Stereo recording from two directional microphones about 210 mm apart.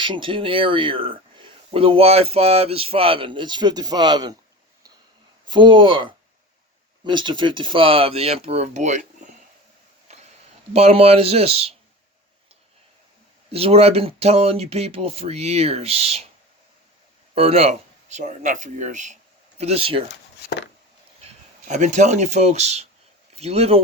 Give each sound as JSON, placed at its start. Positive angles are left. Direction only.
{"t": 0.0, "sound": "speech", "side_deg": -25}
{"t": 5.5, "sound": "speech", "side_deg": -20}
{"t": 10.1, "sound": "a sound", "side_deg": -30}
{"t": 10.8, "sound": "speech", "side_deg": -30}
{"t": 13.5, "sound": "speech", "side_deg": -30}
{"t": 17.3, "sound": "speech", "side_deg": -30}
{"t": 20.4, "sound": "a sound", "side_deg": 55}
{"t": 21.7, "sound": "speech", "side_deg": -35}